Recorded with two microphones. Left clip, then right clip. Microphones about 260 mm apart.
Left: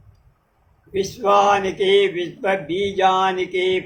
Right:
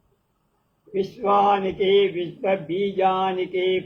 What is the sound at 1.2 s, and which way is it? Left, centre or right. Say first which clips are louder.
Speech: left 3 dB; left.